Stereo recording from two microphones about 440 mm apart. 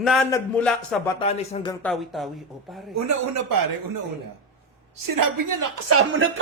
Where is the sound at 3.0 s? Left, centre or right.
Right.